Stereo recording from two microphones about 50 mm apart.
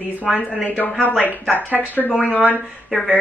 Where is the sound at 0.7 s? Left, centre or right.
Left.